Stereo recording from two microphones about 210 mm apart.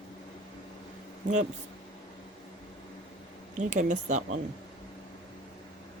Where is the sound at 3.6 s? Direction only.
35° right (ahead or behind).